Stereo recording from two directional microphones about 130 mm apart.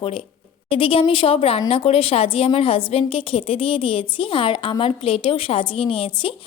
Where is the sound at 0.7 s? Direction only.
45° left (ahead or behind).